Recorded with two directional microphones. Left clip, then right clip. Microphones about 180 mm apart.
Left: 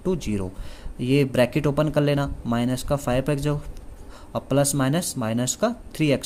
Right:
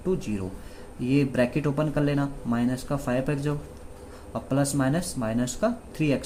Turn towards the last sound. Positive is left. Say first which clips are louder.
# left 4 dB
turn(degrees=45)  # may be behind; listen again after turning